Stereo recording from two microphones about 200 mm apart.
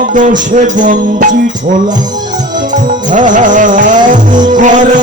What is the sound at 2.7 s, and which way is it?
Music, 40° right (ahead or behind).